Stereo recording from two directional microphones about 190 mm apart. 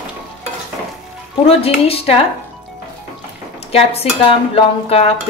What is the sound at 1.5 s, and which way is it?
Speech, 30° left (ahead or behind).